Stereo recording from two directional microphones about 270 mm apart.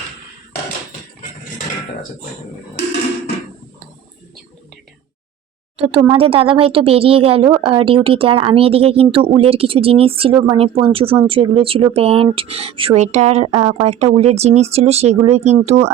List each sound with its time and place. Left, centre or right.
5.7 s a woman's voice: right